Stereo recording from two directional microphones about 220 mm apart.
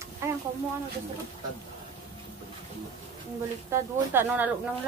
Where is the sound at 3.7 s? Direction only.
10° right (ahead or behind).